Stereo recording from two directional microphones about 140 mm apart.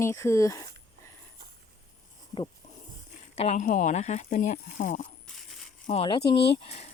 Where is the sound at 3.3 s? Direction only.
50° left (ahead or behind).